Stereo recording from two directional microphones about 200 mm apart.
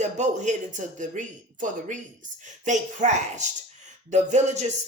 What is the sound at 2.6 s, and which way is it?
Speech, 35° right (ahead or behind).